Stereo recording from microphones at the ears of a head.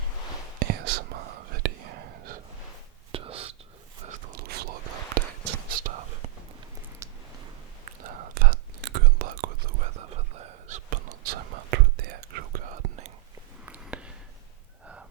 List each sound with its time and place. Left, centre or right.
0.6 s whispering: right
7.9 s whispering: right